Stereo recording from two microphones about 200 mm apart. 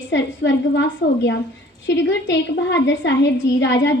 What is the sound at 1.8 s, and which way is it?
A woman's voice, 65° left (ahead or behind).